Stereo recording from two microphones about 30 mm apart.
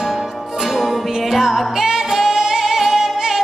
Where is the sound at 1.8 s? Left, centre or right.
Centre.